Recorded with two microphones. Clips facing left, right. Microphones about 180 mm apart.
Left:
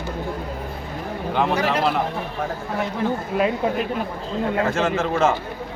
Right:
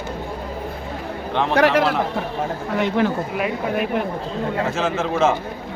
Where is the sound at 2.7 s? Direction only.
80° right.